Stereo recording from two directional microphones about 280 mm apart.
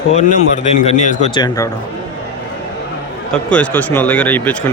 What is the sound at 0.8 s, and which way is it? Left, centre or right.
Speech, left.